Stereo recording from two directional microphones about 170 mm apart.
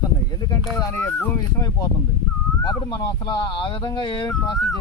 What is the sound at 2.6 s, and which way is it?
Speech, 20° left (ahead or behind).